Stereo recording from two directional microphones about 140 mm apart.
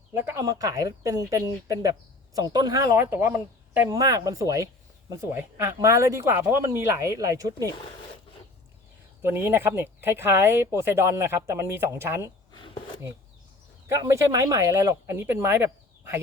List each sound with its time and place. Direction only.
0.1 s speech: 15° right (ahead or behind)
9.2 s speech: 15° right (ahead or behind)
13.8 s speech: 20° right (ahead or behind)